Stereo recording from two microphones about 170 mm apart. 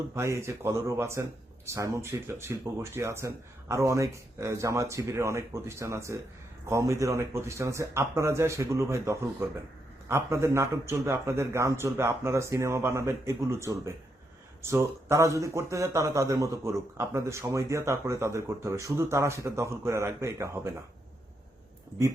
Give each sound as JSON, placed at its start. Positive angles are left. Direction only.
{"t": 0.1, "sound": "speech", "side_deg": -15}